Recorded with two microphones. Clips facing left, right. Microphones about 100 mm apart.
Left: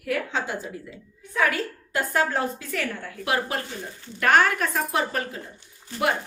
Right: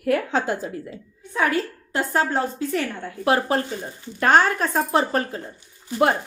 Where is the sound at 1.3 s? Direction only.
30° right (ahead or behind).